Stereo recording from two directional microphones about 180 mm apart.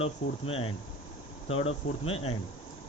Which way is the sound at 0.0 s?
35° left (ahead or behind).